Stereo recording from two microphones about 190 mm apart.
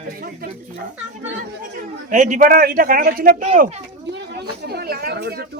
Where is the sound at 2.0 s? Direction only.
40° right (ahead or behind).